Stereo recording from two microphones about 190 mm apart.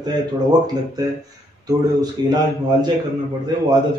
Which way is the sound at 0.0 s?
20° right (ahead or behind).